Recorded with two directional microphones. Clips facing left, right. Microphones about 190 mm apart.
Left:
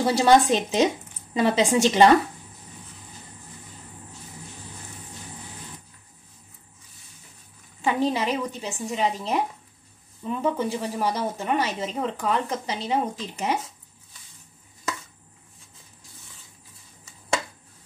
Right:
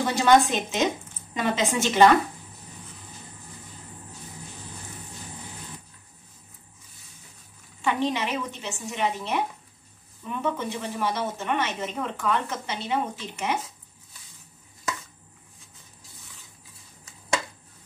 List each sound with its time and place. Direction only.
0.0 s speech: 30° left (ahead or behind)
7.8 s speech: 35° left (ahead or behind)